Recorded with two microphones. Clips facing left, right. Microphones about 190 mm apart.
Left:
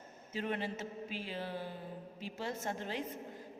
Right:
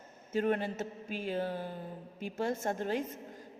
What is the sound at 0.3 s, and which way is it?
A woman's voice, 45° right (ahead or behind).